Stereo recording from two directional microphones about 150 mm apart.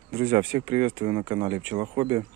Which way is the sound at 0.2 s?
35° right (ahead or behind).